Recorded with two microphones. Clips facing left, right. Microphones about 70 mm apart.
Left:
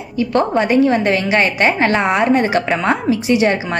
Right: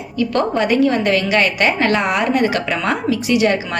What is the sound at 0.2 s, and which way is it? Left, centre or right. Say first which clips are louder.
A woman's voice: left 2 dB; centre.